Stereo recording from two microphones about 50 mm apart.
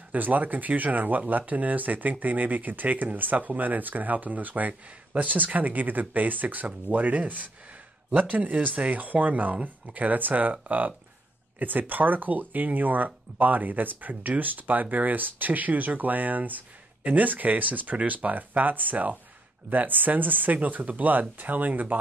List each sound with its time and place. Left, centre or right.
0.1 s speech: right